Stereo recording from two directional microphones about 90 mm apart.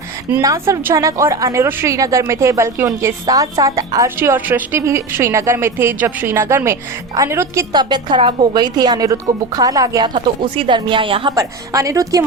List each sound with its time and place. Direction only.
0.4 s a woman's voice: 35° right (ahead or behind)
3.2 s a woman's voice: 40° right (ahead or behind)
4.2 s a woman's voice: 20° right (ahead or behind)
7.7 s speech: 55° right (ahead or behind)
10.2 s speech: 60° right (ahead or behind)
11.3 s a woman's voice: 40° right (ahead or behind)